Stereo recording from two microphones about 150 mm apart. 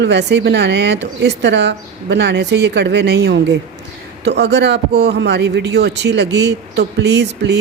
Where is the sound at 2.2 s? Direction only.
90° right.